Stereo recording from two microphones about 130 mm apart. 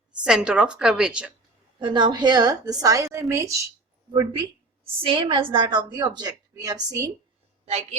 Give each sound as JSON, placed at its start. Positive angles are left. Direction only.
{"t": 0.2, "sound": "a woman's voice", "side_deg": -5}
{"t": 1.8, "sound": "a woman's voice", "side_deg": -35}
{"t": 4.1, "sound": "a woman's voice", "side_deg": -35}
{"t": 7.6, "sound": "speech", "side_deg": -55}